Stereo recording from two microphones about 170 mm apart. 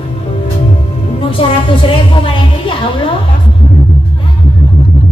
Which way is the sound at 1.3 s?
30° left (ahead or behind).